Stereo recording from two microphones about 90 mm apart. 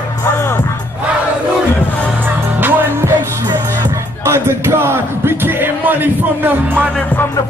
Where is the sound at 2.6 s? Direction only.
25° right (ahead or behind).